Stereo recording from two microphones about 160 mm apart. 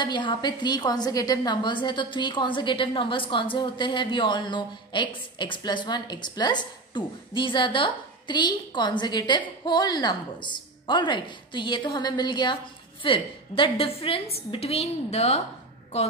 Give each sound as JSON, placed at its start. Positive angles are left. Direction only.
{"t": 0.0, "sound": "a woman's voice", "side_deg": 30}